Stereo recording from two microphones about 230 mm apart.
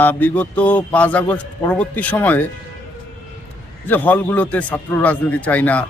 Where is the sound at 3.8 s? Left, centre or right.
Centre.